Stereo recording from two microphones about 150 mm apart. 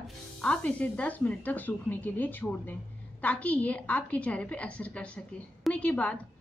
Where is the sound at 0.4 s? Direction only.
5° left (ahead or behind).